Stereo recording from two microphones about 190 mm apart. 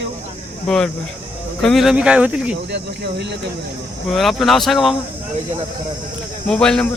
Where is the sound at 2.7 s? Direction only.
65° right (ahead or behind).